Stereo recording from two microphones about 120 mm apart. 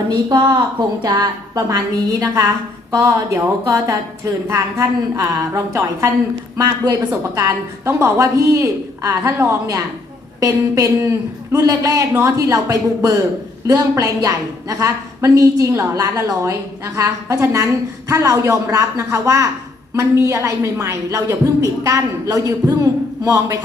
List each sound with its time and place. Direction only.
0.1 s a woman's voice: 35° right (ahead or behind)
7.1 s a woman's voice: 25° right (ahead or behind)